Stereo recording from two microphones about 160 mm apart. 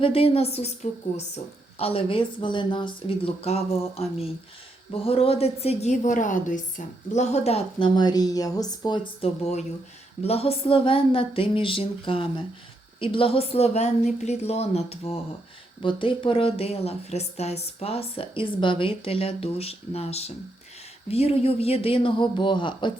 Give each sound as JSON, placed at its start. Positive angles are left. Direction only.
{"t": 0.0, "sound": "speech", "side_deg": 35}
{"t": 9.2, "sound": "speech", "side_deg": 40}